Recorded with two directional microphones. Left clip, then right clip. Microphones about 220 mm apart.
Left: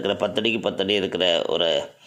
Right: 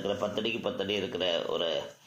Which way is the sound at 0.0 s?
50° left (ahead or behind).